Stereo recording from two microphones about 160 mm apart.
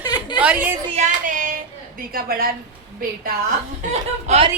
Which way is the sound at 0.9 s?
50° right (ahead or behind).